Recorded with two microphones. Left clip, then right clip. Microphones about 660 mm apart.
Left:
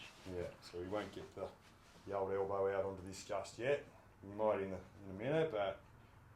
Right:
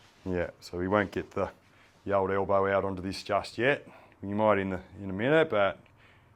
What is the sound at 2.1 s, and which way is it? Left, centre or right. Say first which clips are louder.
Speech: right 13 dB; right.